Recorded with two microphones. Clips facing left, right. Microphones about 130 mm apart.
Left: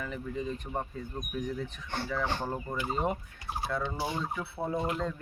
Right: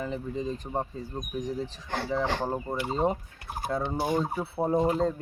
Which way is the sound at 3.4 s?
50° right (ahead or behind).